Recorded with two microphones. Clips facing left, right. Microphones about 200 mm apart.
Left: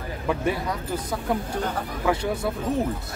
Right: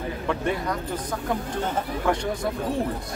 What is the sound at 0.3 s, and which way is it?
Speech, 5° left (ahead or behind).